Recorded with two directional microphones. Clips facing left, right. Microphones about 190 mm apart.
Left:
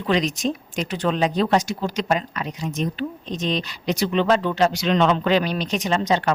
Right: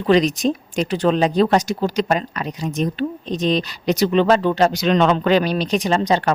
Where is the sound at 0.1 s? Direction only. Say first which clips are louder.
Right 6 dB; 35° right (ahead or behind).